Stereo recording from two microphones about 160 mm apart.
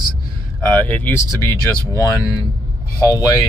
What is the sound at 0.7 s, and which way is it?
Speech, 10° left (ahead or behind).